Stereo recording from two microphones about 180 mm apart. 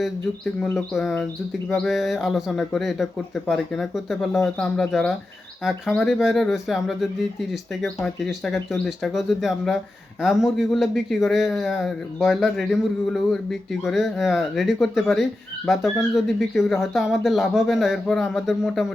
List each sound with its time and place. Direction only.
0.6 s speech: centre (ahead or behind)